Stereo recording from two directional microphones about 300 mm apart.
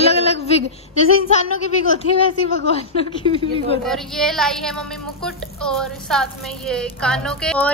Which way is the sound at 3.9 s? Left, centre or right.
Centre.